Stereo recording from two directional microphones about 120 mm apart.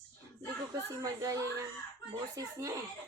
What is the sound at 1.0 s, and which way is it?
Speech, 30° right (ahead or behind).